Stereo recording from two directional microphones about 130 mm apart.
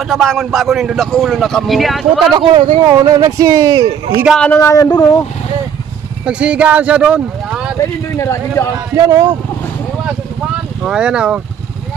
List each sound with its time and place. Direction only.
0.1 s speech: centre (ahead or behind)
2.3 s speech: 40° right (ahead or behind)
2.9 s speech: 30° right (ahead or behind)
4.6 s speech: 25° left (ahead or behind)
6.2 s speech: 10° right (ahead or behind)
8.2 s speech: 20° left (ahead or behind)
8.9 s speech: 25° right (ahead or behind)
10.8 s speech: 5° right (ahead or behind)